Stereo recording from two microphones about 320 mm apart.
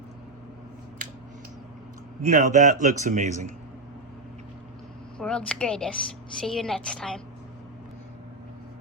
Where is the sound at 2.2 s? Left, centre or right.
Right.